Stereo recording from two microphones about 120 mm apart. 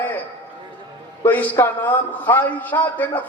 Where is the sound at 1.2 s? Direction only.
15° left (ahead or behind).